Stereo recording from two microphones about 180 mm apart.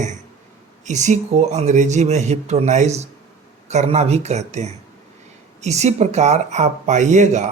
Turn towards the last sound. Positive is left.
turn(degrees=-40)  # may be behind; listen again after turning